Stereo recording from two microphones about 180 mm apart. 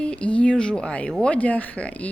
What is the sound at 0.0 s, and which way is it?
Speech, 5° left (ahead or behind).